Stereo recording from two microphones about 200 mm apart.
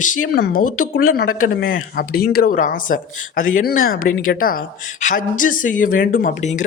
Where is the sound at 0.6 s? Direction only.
90° left.